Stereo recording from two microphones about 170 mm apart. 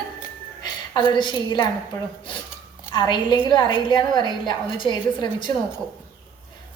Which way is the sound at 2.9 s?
25° left (ahead or behind).